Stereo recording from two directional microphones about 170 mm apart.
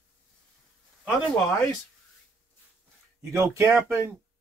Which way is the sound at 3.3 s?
15° right (ahead or behind).